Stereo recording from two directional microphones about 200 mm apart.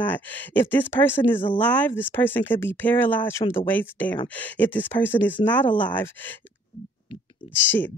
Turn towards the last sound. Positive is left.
turn(degrees=10)  # may be behind; listen again after turning